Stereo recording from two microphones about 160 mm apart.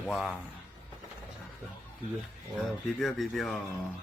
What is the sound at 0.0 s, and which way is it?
Speech, centre (ahead or behind).